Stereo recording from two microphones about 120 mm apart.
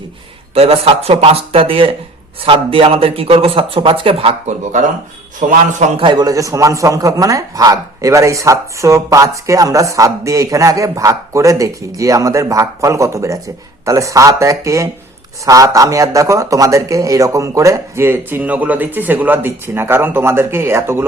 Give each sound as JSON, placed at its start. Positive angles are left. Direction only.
{"t": 0.5, "sound": "a man's voice", "side_deg": -55}
{"t": 5.4, "sound": "a man's voice", "side_deg": -90}
{"t": 6.0, "sound": "a man's voice", "side_deg": -40}